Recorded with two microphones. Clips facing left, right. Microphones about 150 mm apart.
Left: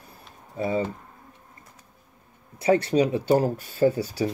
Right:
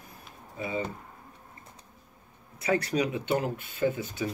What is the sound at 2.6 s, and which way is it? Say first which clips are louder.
Speech: left 7 dB; 30° left (ahead or behind).